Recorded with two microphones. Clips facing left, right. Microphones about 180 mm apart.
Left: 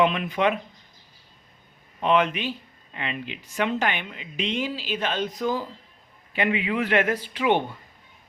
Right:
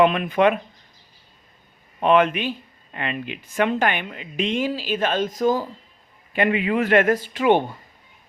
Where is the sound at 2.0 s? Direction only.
55° right (ahead or behind).